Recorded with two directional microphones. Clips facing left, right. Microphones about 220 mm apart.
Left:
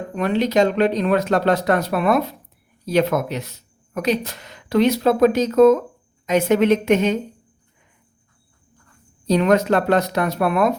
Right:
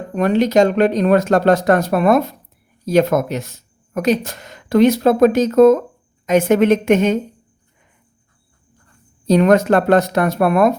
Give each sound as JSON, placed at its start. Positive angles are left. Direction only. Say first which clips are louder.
{"t": 0.2, "sound": "speech", "louder": "right 4 dB", "side_deg": -45}
{"t": 9.2, "sound": "speech", "louder": "right 4 dB", "side_deg": -50}